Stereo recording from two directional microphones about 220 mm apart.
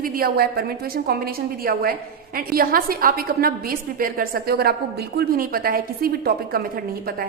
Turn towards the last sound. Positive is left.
turn(degrees=-45)  # may be behind; listen again after turning